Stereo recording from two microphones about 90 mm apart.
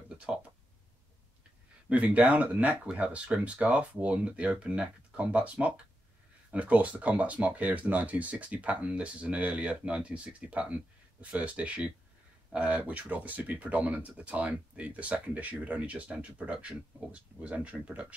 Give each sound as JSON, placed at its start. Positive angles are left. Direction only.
{"t": 0.3, "sound": "speech", "side_deg": -10}
{"t": 1.9, "sound": "speech", "side_deg": -15}